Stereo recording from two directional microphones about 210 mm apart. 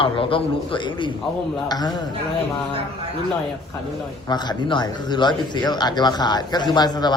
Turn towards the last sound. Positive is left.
turn(degrees=20)  # may be behind; listen again after turning